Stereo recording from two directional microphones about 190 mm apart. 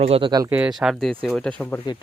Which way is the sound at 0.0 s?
30° right (ahead or behind).